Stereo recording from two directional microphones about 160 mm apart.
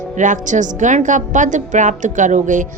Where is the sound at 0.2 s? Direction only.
50° right (ahead or behind).